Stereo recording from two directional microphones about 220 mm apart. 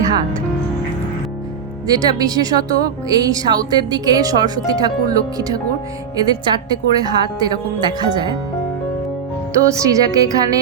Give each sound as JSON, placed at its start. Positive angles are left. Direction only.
{"t": 1.9, "sound": "a woman's voice", "side_deg": -15}
{"t": 9.5, "sound": "speech", "side_deg": -15}